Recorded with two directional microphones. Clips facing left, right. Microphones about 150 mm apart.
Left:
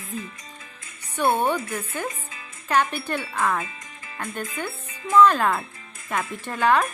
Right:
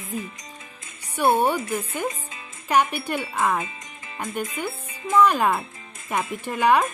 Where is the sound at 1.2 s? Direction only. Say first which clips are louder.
Right 2 dB; 10° right (ahead or behind).